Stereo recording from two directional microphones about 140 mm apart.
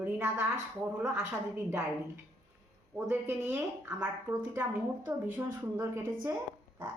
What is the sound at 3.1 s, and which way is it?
Speech, 15° right (ahead or behind).